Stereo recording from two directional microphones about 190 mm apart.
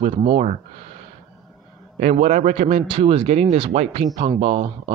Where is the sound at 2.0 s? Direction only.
40° right (ahead or behind).